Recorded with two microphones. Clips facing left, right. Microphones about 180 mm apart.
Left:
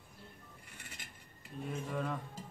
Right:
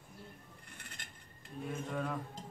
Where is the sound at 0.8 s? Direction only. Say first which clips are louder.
Left 1 dB; 5° left (ahead or behind).